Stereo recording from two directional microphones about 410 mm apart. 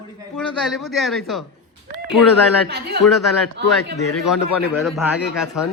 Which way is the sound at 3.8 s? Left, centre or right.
Left.